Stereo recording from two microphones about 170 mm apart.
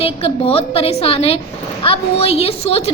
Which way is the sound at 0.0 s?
35° left (ahead or behind).